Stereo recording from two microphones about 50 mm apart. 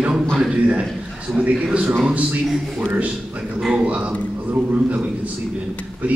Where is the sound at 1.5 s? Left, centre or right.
Right.